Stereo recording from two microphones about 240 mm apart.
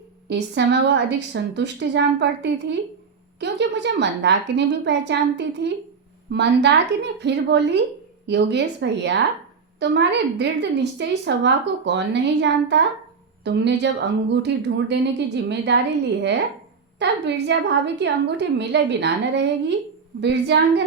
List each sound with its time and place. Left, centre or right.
0.3 s a woman's voice: right
17.0 s a woman's voice: right